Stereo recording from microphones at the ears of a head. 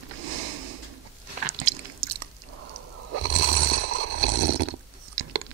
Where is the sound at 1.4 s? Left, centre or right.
Right.